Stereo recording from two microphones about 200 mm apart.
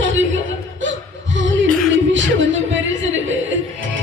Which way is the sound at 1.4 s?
65° right (ahead or behind).